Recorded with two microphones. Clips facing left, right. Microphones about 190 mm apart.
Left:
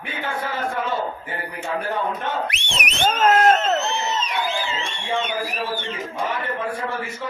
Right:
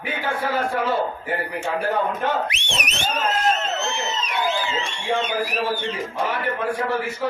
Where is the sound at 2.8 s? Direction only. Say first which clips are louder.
Left 6 dB; 60° left (ahead or behind).